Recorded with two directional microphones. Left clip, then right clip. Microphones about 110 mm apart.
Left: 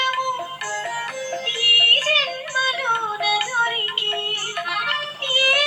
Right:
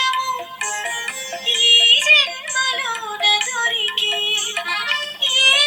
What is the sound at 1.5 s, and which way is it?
Music, 30° right (ahead or behind).